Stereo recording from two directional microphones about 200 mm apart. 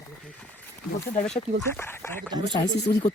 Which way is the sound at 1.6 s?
10° left (ahead or behind).